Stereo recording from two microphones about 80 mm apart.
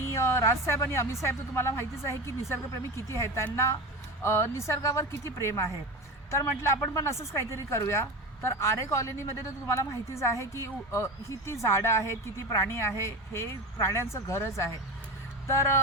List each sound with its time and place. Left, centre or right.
0.1 s speech: left